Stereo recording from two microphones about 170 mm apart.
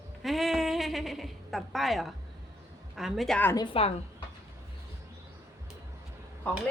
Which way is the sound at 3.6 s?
35° left (ahead or behind).